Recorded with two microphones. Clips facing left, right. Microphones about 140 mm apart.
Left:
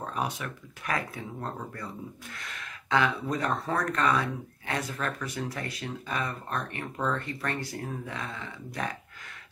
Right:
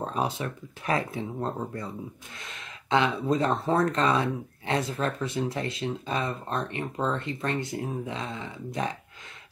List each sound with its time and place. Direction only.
0.0 s speech: 30° right (ahead or behind)